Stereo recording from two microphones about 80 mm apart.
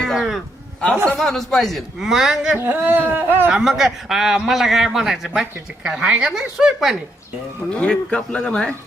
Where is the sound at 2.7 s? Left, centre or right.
Right.